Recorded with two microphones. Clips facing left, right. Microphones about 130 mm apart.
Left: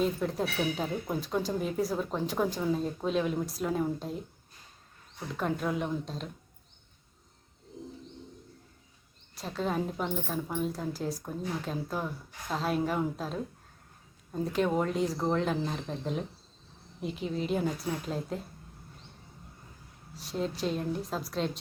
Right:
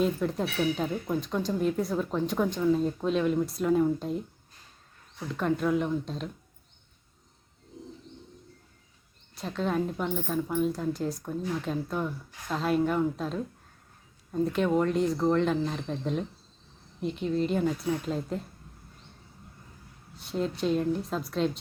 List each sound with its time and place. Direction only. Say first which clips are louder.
0.0 s speech: right 2 dB; centre (ahead or behind)
5.3 s speech: right 5 dB; centre (ahead or behind)
9.3 s speech: right 3 dB; centre (ahead or behind)
20.1 s speech: right 3 dB; centre (ahead or behind)